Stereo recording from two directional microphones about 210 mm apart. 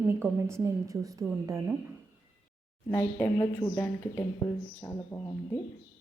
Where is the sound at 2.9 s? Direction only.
10° left (ahead or behind).